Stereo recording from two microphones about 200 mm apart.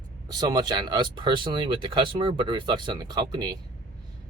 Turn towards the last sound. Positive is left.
turn(degrees=-20)  # may be behind; listen again after turning